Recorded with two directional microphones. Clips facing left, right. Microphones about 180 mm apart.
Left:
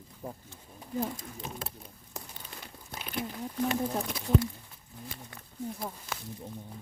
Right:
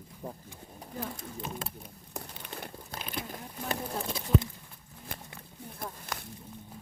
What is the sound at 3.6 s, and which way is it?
Speech, 25° right (ahead or behind).